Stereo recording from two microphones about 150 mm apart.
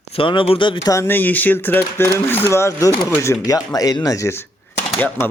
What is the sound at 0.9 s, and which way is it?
Speech, 15° left (ahead or behind).